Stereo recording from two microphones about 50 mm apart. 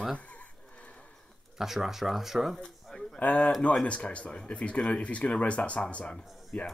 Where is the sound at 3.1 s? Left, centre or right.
Left.